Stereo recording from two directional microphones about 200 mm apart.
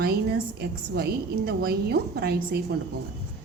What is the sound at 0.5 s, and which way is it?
A woman's voice, 50° right (ahead or behind).